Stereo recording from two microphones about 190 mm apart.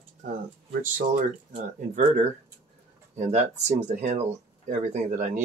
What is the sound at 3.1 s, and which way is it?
Speech, 40° right (ahead or behind).